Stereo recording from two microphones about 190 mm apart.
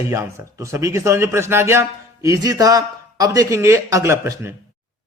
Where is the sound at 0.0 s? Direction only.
15° right (ahead or behind).